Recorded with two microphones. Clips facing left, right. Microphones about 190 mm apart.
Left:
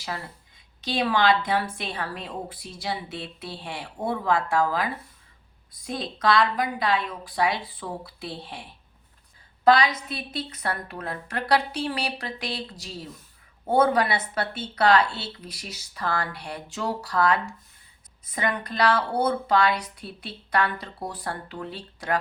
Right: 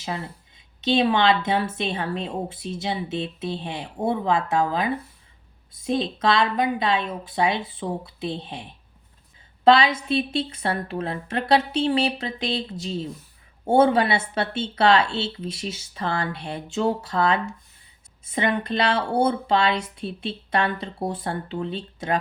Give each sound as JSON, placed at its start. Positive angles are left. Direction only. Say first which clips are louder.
{"t": 0.0, "sound": "a woman's voice", "louder": "right 4 dB", "side_deg": -20}